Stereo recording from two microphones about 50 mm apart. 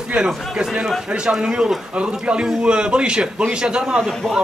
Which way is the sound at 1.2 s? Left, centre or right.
Centre.